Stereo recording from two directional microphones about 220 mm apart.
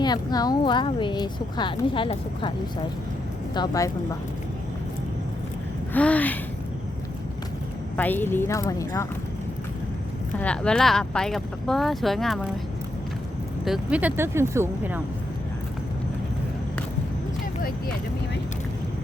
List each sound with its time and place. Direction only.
0.0 s speech: 20° left (ahead or behind)
3.5 s speech: 15° left (ahead or behind)
5.9 s speech: 5° left (ahead or behind)
7.9 s speech: 10° left (ahead or behind)
10.4 s speech: 5° left (ahead or behind)
13.7 s speech: 5° right (ahead or behind)